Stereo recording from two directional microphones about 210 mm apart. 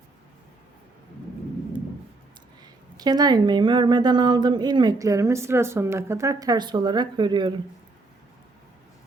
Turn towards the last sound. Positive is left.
turn(degrees=-20)  # may be behind; listen again after turning